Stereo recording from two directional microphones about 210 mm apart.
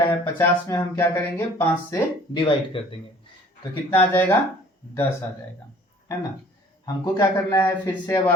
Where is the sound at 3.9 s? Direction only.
10° left (ahead or behind).